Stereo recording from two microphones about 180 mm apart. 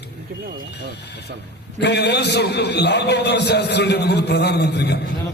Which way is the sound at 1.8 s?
70° left (ahead or behind).